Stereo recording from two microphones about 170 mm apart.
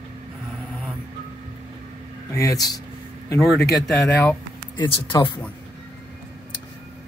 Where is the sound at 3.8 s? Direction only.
5° left (ahead or behind).